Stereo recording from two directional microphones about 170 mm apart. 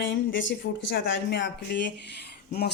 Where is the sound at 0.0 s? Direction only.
90° left.